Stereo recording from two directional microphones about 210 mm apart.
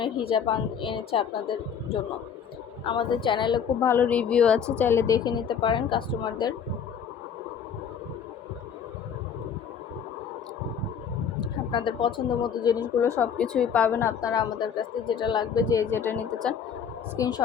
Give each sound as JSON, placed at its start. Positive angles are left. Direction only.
{"t": 0.0, "sound": "a woman's voice", "side_deg": 25}
{"t": 11.7, "sound": "a woman's voice", "side_deg": 20}
{"t": 13.1, "sound": "a woman's voice", "side_deg": 5}